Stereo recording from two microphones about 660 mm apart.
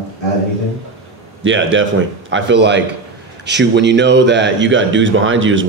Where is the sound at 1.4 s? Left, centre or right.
Centre.